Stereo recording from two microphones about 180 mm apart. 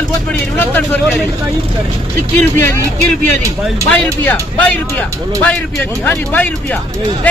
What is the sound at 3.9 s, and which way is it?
Speech, 10° left (ahead or behind).